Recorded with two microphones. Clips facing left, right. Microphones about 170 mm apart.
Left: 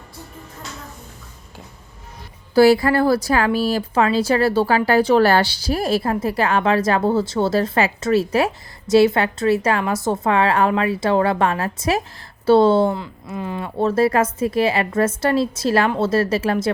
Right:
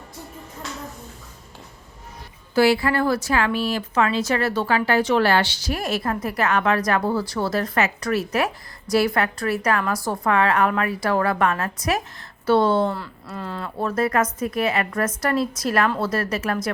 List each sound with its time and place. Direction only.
2.6 s speech: 40° left (ahead or behind)